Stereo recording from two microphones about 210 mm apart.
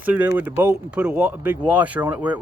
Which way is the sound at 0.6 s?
5° right (ahead or behind).